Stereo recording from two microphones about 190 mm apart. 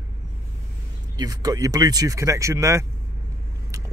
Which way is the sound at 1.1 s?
20° right (ahead or behind).